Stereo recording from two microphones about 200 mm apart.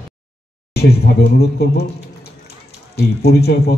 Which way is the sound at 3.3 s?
50° left (ahead or behind).